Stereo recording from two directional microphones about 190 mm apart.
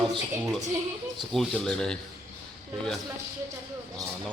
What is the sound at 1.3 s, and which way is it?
Speech, 5° left (ahead or behind).